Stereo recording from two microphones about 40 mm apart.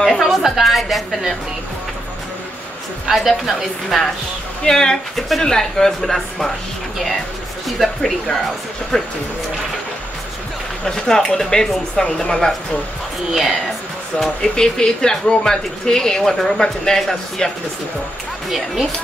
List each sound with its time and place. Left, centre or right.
0.2 s a woman's voice: centre
3.1 s a woman's voice: centre
4.6 s speech: centre
7.6 s a woman's voice: centre
8.9 s speech: centre
10.9 s speech: centre
13.3 s a woman's voice: centre
14.1 s speech: centre